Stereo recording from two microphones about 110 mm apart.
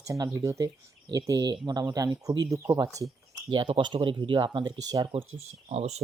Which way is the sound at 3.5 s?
45° right (ahead or behind).